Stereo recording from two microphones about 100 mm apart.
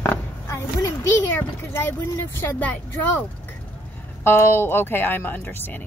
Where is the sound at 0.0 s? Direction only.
25° left (ahead or behind).